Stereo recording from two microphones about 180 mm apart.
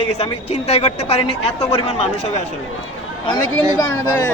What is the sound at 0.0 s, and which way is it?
Speech, 35° left (ahead or behind).